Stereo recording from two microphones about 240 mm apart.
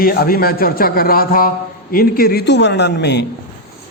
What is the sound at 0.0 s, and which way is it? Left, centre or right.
A man's voice, left.